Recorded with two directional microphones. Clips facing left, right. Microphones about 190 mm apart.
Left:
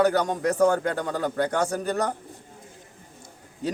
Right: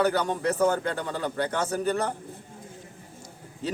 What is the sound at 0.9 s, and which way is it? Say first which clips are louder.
A man's voice: left 3 dB; 45° left (ahead or behind).